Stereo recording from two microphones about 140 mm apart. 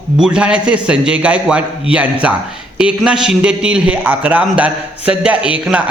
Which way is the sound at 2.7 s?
5° right (ahead or behind).